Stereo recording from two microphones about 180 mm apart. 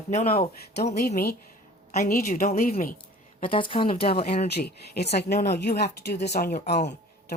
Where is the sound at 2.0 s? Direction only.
60° left (ahead or behind).